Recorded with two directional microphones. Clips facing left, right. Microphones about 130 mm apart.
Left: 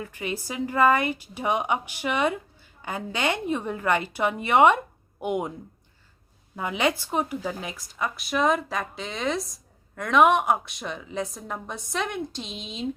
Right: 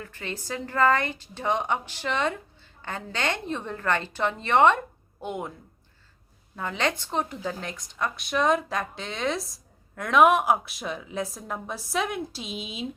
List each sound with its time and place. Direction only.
0.0 s a woman's voice: 15° left (ahead or behind)
6.6 s speech: 10° left (ahead or behind); by 12.9 s 5° right (ahead or behind)